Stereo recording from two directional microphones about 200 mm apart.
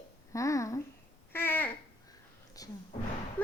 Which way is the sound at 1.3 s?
10° left (ahead or behind).